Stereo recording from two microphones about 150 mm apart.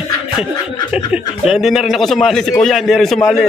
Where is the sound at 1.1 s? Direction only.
Centre (ahead or behind).